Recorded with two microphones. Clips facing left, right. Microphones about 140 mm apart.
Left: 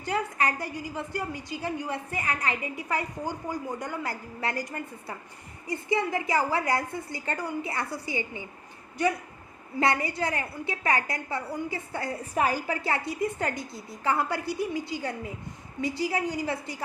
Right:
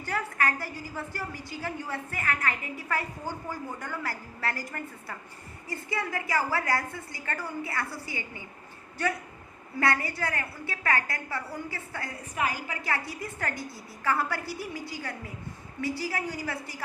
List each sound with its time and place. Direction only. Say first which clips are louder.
0.0 s a woman's voice: left 2 dB; 20° left (ahead or behind)